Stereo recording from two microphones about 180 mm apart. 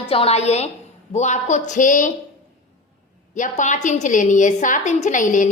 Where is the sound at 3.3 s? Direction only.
45° left (ahead or behind).